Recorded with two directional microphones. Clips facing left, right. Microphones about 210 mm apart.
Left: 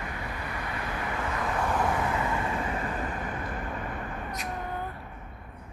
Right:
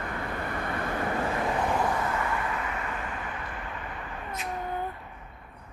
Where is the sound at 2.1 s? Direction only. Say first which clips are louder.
Left 1 dB; 20° left (ahead or behind).